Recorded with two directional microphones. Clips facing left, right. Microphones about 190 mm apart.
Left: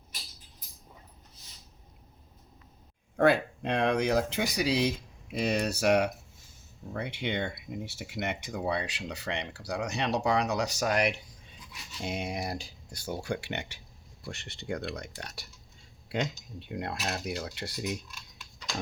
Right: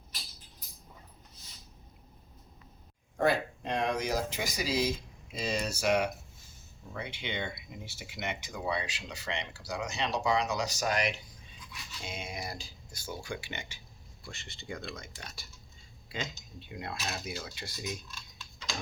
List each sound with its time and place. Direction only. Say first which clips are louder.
3.2 s speech: left 4 dB; 65° left (ahead or behind)